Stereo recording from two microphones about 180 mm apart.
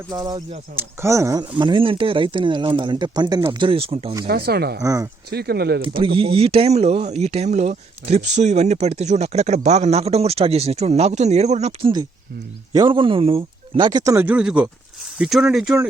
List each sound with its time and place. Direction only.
0.1 s speech: 20° right (ahead or behind)
4.3 s speech: 60° right (ahead or behind)
4.8 s speech: 20° right (ahead or behind)
5.3 s speech: 60° right (ahead or behind)
5.8 s speech: 30° right (ahead or behind)
12.7 s speech: 25° right (ahead or behind); by 15.9 s 5° right (ahead or behind)